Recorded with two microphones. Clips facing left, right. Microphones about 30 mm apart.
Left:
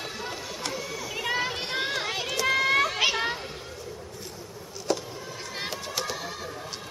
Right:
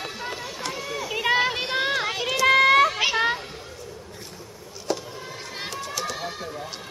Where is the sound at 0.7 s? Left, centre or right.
Right.